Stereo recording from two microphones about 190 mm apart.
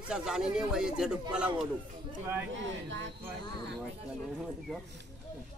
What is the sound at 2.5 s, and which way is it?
Speech, 75° right (ahead or behind).